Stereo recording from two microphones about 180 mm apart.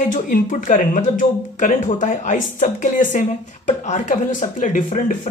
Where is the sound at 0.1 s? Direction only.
45° left (ahead or behind).